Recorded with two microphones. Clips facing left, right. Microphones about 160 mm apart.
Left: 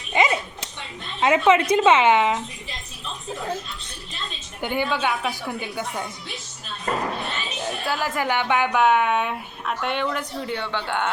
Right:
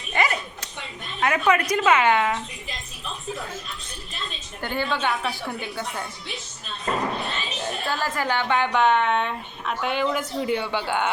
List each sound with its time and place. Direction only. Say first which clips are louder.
0.1 s dog: left 3 dB; 20° left (ahead or behind)
1.2 s speech: left 4 dB; 20° left (ahead or behind)
4.6 s a woman's voice: left 2 dB; 15° left (ahead or behind)
7.6 s a woman's voice: left 1 dB; 10° left (ahead or behind)